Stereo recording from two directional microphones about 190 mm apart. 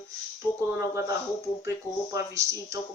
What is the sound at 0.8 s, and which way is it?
Speech, 15° right (ahead or behind).